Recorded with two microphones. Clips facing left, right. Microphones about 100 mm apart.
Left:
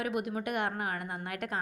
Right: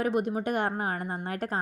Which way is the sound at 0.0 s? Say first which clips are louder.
Right 6 dB; 30° right (ahead or behind).